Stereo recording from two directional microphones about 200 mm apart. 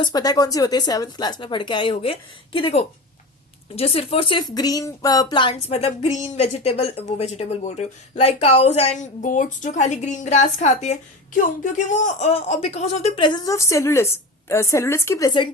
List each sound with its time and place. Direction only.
0.0 s a woman's voice: 20° left (ahead or behind)